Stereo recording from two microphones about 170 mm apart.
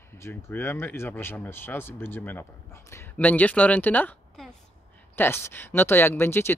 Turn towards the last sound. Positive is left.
turn(degrees=15)  # may be behind; listen again after turning